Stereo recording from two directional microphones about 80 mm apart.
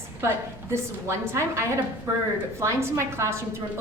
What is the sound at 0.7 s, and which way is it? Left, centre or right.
A woman's voice, right.